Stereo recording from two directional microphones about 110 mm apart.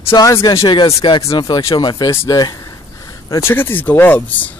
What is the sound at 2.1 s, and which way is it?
Speech, 25° left (ahead or behind).